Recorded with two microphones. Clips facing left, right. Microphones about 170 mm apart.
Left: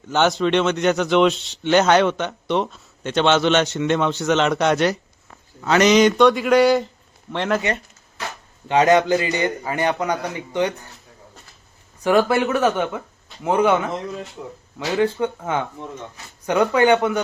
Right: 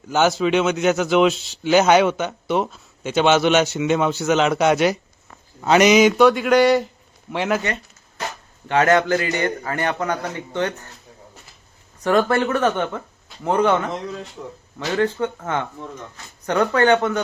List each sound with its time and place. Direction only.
0.1 s speech: 5° right (ahead or behind)
8.6 s speech: 15° left (ahead or behind)
12.0 s speech: 5° left (ahead or behind)